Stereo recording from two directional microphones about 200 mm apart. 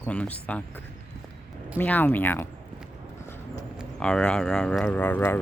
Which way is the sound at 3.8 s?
5° left (ahead or behind).